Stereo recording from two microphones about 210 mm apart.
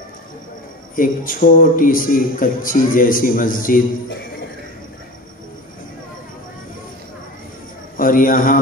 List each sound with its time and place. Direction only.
0.9 s a man's voice: 40° left (ahead or behind)
8.0 s a man's voice: 40° left (ahead or behind)